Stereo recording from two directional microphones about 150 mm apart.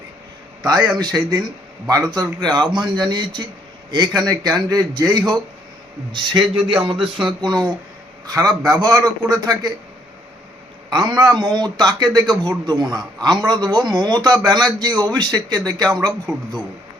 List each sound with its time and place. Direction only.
0.9 s a man's voice: 25° right (ahead or behind)
10.8 s a man's voice: 30° right (ahead or behind)